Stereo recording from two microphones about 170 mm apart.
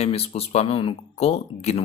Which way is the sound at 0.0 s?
35° left (ahead or behind).